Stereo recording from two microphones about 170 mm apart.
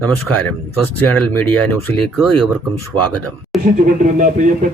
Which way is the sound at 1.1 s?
10° left (ahead or behind).